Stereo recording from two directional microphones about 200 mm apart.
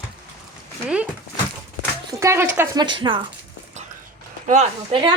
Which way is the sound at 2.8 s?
25° right (ahead or behind).